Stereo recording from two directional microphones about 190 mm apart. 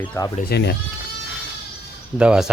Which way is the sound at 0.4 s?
60° left (ahead or behind).